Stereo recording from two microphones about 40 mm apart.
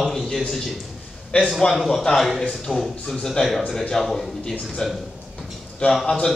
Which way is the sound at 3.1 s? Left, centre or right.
Centre.